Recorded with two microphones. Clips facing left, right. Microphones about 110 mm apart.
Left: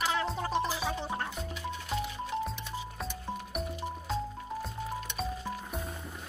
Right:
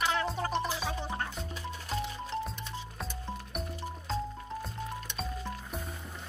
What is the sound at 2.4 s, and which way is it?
Music, centre (ahead or behind).